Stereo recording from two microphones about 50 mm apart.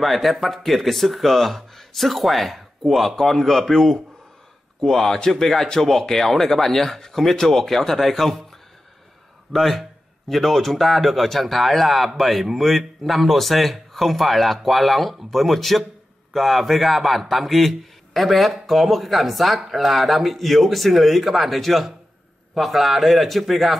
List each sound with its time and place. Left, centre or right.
0.0 s speech: centre
9.5 s speech: centre